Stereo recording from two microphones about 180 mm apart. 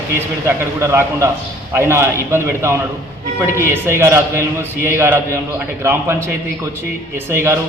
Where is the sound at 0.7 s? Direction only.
15° right (ahead or behind).